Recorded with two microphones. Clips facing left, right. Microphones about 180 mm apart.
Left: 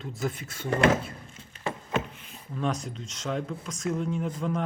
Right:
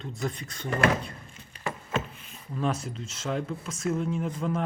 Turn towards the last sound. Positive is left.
turn(degrees=0)  # may be behind; listen again after turning